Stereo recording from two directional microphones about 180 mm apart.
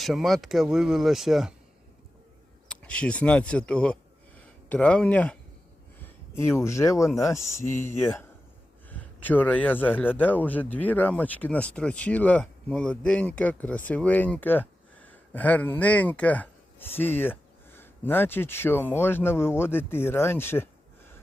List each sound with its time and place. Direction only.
0.0 s speech: centre (ahead or behind)
2.6 s speech: 5° left (ahead or behind)